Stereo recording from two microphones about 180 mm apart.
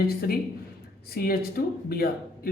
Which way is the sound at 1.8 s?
55° left (ahead or behind).